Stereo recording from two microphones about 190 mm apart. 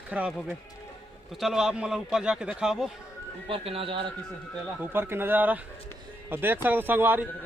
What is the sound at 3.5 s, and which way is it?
Speech, 30° right (ahead or behind).